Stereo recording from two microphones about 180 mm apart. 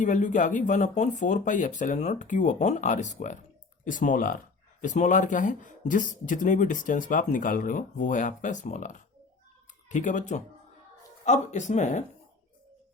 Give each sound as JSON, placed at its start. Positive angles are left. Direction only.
{"t": 0.0, "sound": "speech", "side_deg": 45}